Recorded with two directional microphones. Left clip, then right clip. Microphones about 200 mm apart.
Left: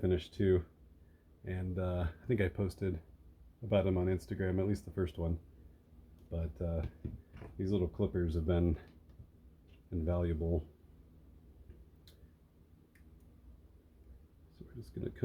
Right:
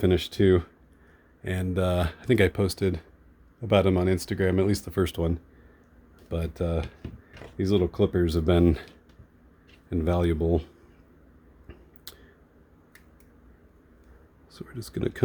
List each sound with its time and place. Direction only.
0.0 s speech: 50° right (ahead or behind)
6.3 s speech: 50° right (ahead or behind)
9.9 s speech: 50° right (ahead or behind)
12.1 s finger snapping: 50° right (ahead or behind)
14.8 s speech: 50° right (ahead or behind)